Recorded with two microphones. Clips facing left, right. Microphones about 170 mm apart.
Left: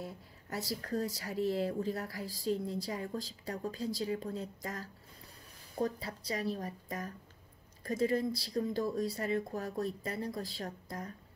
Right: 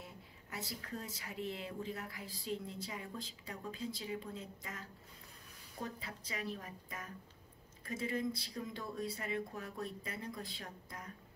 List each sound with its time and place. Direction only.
0.0 s speech: 40° left (ahead or behind)